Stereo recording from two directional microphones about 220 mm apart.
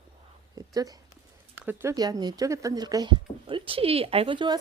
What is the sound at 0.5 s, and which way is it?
Speech, 15° right (ahead or behind).